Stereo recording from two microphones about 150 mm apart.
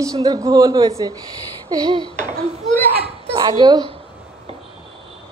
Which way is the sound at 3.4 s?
25° right (ahead or behind).